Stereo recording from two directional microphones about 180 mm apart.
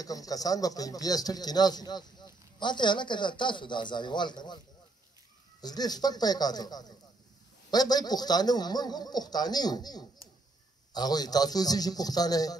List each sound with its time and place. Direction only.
0.0 s speech: 20° left (ahead or behind)
5.6 s speech: 20° left (ahead or behind)